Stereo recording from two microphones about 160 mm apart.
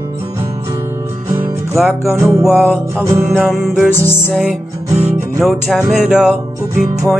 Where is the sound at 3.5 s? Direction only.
5° right (ahead or behind).